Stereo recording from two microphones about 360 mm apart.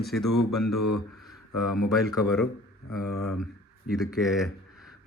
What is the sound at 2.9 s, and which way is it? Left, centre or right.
Speech, left.